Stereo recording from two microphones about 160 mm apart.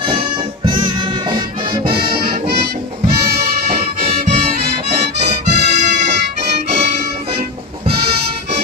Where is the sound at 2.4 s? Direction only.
90° right.